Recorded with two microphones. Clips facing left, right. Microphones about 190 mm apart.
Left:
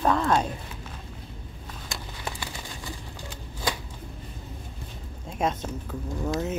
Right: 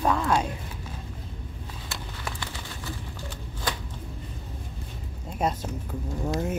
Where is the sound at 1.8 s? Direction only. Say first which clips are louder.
Left 1 dB; 15° left (ahead or behind).